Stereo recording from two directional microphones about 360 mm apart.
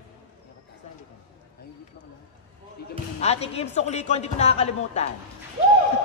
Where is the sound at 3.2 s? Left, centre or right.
Centre.